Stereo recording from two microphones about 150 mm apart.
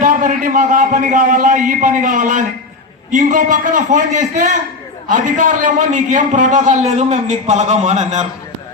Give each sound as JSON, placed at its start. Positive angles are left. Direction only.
{"t": 0.0, "sound": "a man's voice", "side_deg": -60}